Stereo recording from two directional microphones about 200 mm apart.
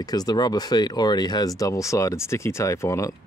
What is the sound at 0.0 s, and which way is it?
Speech, 20° left (ahead or behind).